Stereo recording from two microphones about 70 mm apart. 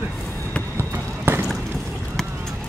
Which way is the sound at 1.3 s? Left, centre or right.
Right.